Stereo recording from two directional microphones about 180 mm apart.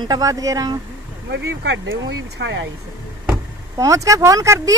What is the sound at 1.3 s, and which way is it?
Speech, 75° right (ahead or behind).